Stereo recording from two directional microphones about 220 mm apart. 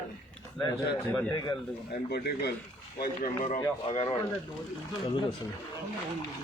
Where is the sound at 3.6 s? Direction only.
25° left (ahead or behind).